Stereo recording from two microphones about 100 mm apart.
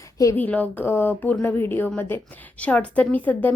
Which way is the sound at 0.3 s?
15° left (ahead or behind).